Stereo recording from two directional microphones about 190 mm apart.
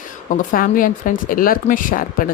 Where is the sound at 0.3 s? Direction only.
45° left (ahead or behind).